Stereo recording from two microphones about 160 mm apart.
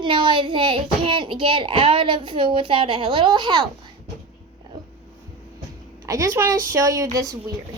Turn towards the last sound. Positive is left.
turn(degrees=-20)  # may be behind; listen again after turning